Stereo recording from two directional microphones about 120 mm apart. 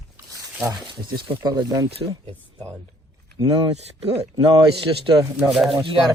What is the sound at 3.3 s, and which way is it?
Speech, 35° right (ahead or behind).